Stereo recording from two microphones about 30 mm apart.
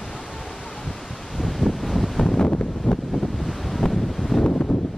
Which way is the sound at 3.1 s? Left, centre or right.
Centre.